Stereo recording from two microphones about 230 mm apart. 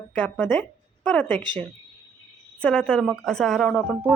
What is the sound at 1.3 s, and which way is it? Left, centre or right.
Speech, centre.